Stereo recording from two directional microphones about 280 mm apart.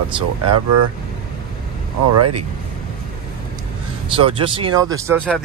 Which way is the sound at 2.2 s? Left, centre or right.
Right.